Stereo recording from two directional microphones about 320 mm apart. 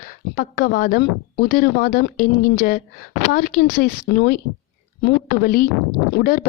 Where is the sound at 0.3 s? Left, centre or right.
Left.